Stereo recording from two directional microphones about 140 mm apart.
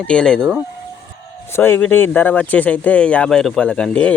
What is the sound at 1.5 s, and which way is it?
Speech, 15° left (ahead or behind).